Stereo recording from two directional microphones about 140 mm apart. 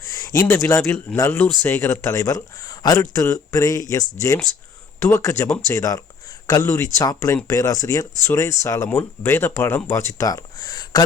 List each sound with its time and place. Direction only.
0.0 s speech: 25° left (ahead or behind)